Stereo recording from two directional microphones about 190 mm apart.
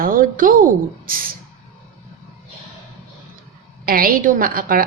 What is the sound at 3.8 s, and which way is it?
A woman's voice, 50° right (ahead or behind).